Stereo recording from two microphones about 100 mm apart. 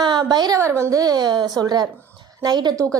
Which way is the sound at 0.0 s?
45° right (ahead or behind).